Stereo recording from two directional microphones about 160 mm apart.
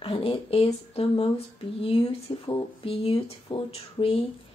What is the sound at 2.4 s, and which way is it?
Speech, 35° left (ahead or behind).